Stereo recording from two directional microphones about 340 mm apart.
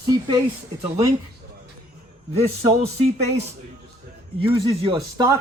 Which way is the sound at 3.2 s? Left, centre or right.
Centre.